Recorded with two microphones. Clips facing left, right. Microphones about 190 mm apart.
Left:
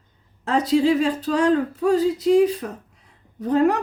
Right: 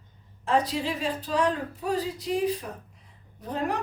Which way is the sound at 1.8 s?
70° left (ahead or behind).